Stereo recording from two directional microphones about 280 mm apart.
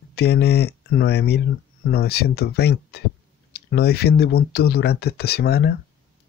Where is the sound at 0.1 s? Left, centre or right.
Left.